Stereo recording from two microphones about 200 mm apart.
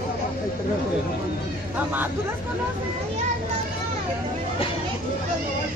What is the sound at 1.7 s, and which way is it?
Speech, 10° right (ahead or behind).